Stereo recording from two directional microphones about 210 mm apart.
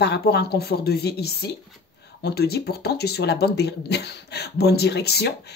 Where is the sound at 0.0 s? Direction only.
50° left (ahead or behind).